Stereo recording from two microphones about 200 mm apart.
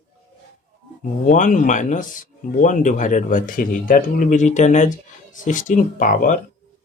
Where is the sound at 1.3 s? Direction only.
40° left (ahead or behind).